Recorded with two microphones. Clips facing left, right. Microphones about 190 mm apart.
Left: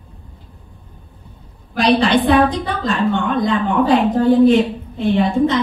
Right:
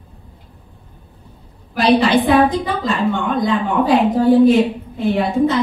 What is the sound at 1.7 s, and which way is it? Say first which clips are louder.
A woman's voice: right 1 dB; 5° right (ahead or behind).